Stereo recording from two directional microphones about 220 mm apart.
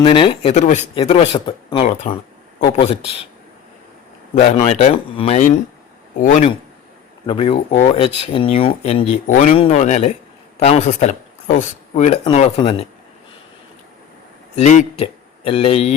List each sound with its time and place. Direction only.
0.0 s speech: 25° left (ahead or behind)
4.4 s speech: 30° left (ahead or behind)
7.3 s speech: 25° left (ahead or behind)
14.5 s speech: 35° left (ahead or behind)